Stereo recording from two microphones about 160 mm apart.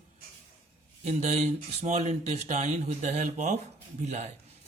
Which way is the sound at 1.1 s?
45° right (ahead or behind).